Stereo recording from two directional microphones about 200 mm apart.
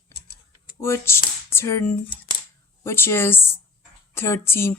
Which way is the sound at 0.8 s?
10° left (ahead or behind).